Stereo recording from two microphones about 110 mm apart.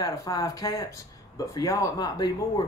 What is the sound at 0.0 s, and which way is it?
Speech, 30° left (ahead or behind).